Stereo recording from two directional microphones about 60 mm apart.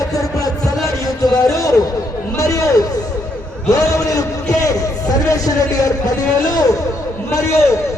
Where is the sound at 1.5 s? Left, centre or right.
Left.